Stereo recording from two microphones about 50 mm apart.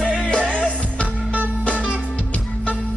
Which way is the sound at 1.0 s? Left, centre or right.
Right.